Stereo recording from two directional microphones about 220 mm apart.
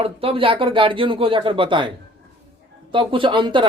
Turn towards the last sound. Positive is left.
turn(degrees=-20)  # may be behind; listen again after turning